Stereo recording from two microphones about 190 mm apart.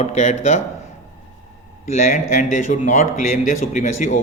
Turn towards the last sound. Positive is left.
turn(degrees=40)  # may be behind; listen again after turning